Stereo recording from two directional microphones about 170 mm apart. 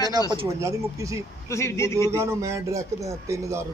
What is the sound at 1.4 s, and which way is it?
Speech, 15° left (ahead or behind).